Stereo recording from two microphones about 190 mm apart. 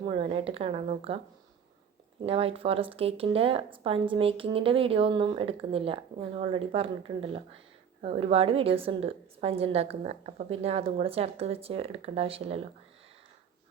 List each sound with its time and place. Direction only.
0.0 s a woman's voice: 30° right (ahead or behind)
2.2 s a woman's voice: 30° right (ahead or behind)